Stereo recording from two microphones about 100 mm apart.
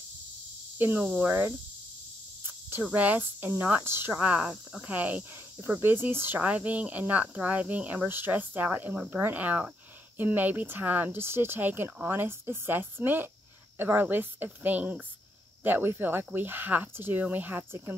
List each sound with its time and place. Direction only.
0.7 s speech: 20° right (ahead or behind)